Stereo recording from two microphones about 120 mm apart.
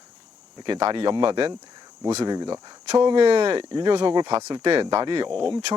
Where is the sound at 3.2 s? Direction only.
50° right (ahead or behind).